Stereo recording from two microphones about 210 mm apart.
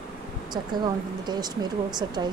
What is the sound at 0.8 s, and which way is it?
Speech, 20° right (ahead or behind).